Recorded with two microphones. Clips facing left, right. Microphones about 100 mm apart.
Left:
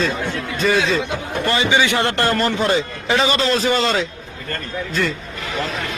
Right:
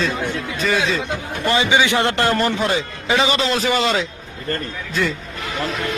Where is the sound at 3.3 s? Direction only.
15° right (ahead or behind).